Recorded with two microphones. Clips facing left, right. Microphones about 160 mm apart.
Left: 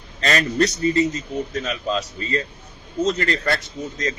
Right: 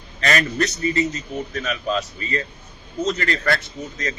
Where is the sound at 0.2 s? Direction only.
30° left (ahead or behind).